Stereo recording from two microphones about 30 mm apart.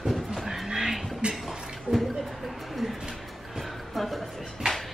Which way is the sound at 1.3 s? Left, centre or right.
Centre.